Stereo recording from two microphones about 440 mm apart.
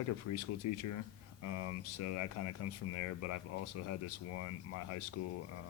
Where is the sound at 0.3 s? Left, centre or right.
Left.